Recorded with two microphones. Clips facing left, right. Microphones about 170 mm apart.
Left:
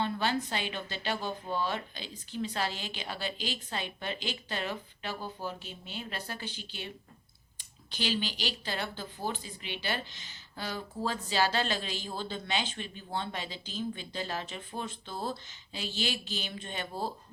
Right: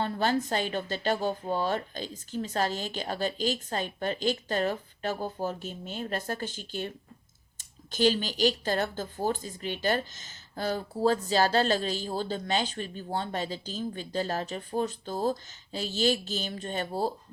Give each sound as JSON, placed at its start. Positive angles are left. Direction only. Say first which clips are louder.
{"t": 0.0, "sound": "speech", "louder": "right 3 dB", "side_deg": -40}